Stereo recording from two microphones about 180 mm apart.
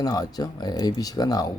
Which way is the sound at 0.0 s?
20° left (ahead or behind).